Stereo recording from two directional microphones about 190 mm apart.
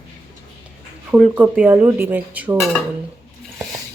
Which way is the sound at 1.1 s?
5° right (ahead or behind).